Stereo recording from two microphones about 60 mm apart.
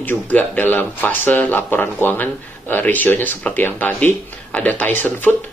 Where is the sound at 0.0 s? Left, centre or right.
Left.